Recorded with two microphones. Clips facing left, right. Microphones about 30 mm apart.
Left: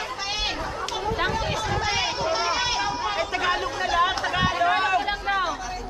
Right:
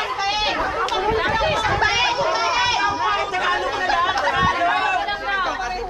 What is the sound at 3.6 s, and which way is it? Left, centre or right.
Chatter, right.